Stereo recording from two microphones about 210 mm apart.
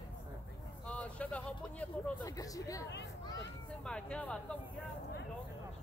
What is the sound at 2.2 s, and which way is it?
Speech, 15° left (ahead or behind).